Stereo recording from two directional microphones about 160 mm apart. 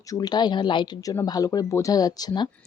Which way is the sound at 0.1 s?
25° left (ahead or behind).